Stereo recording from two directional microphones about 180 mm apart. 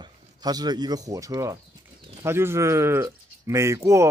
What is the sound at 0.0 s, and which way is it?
Speech, 20° right (ahead or behind).